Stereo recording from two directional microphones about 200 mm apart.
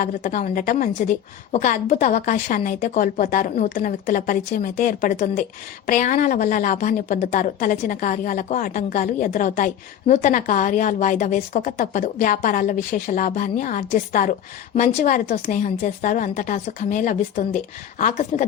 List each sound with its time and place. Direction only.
0.0 s a woman's voice: 40° left (ahead or behind)